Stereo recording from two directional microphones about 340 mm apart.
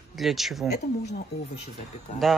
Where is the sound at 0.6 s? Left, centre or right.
Left.